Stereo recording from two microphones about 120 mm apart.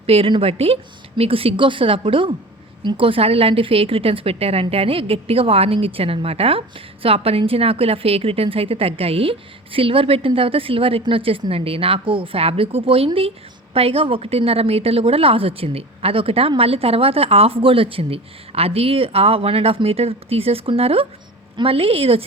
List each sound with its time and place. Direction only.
0.0 s a woman's voice: 55° right (ahead or behind)